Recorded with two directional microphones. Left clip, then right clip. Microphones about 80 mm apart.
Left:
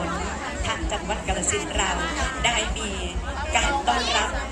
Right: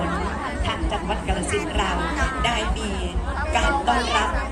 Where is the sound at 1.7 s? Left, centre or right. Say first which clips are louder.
Right 1 dB; right.